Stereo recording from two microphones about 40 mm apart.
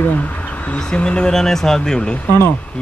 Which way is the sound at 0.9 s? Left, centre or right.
Left.